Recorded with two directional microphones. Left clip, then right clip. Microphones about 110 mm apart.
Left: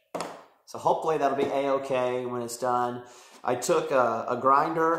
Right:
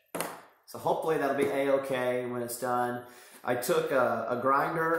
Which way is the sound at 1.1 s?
20° left (ahead or behind).